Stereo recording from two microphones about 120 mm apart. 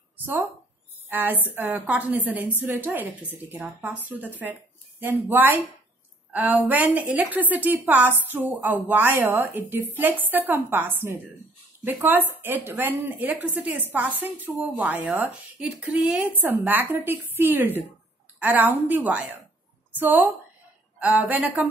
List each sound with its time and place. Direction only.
1.0 s a woman's voice: 15° right (ahead or behind)